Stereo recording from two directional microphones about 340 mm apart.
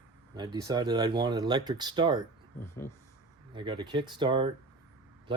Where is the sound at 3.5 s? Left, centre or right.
Centre.